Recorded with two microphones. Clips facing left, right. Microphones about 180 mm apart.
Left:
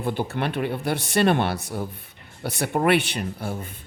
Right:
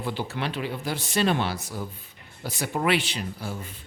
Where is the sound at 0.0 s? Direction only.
55° left (ahead or behind).